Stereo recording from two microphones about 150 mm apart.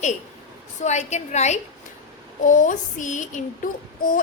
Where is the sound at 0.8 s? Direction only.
50° left (ahead or behind).